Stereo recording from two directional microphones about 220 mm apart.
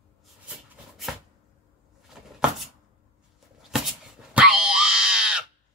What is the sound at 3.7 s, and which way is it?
Wail, 5° right (ahead or behind).